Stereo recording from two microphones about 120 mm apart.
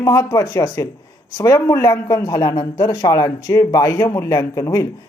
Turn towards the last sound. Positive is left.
turn(degrees=30)  # may be behind; listen again after turning